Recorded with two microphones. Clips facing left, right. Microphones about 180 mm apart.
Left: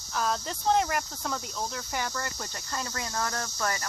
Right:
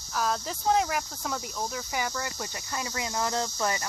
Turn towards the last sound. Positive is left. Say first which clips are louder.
# right 3 dB
turn(degrees=-20)  # may be behind; listen again after turning